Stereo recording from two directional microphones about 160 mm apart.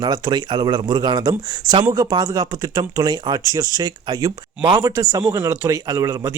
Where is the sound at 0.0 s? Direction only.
25° right (ahead or behind).